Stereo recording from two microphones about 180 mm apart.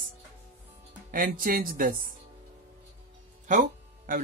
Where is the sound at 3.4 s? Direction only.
45° right (ahead or behind).